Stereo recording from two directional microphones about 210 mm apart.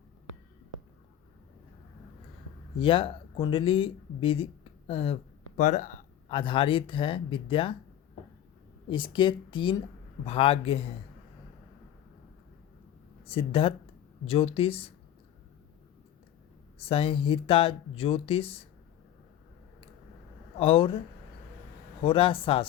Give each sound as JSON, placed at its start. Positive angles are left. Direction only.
{"t": 2.7, "sound": "speech", "side_deg": 25}
{"t": 5.5, "sound": "a sound", "side_deg": 35}
{"t": 6.3, "sound": "speech", "side_deg": 25}
{"t": 8.9, "sound": "speech", "side_deg": 25}
{"t": 13.2, "sound": "speech", "side_deg": 25}
{"t": 16.8, "sound": "speech", "side_deg": 25}
{"t": 20.6, "sound": "speech", "side_deg": 25}
{"t": 22.0, "sound": "speech", "side_deg": 25}